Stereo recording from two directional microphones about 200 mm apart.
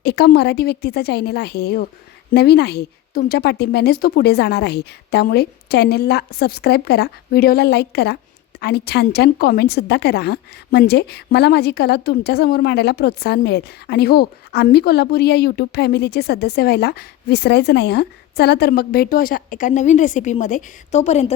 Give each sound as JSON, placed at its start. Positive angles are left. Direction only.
{"t": 0.0, "sound": "a woman's voice", "side_deg": 55}